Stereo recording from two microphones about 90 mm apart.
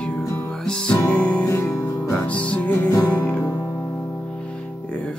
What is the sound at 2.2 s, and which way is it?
Music, 15° left (ahead or behind).